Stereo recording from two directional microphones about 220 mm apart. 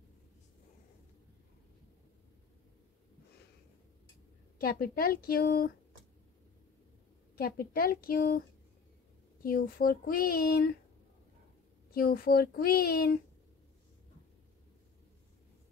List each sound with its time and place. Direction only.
4.6 s speech: 45° left (ahead or behind)
7.3 s speech: 45° left (ahead or behind)
9.4 s speech: 40° left (ahead or behind)
11.9 s speech: 40° left (ahead or behind)